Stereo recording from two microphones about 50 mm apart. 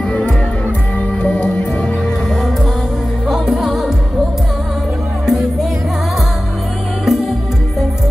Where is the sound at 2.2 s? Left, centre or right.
Centre.